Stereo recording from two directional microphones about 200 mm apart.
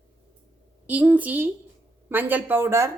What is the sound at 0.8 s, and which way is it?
A woman's voice, 10° right (ahead or behind).